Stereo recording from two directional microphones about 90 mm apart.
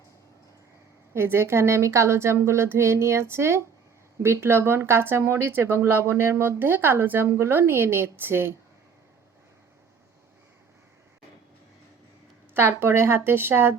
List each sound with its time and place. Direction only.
1.1 s a woman's voice: 25° right (ahead or behind)
12.5 s a woman's voice: 25° right (ahead or behind)